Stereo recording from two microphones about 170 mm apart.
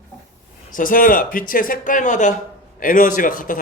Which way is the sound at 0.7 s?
55° left (ahead or behind).